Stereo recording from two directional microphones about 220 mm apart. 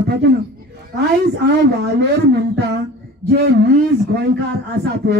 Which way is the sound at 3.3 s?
45° right (ahead or behind).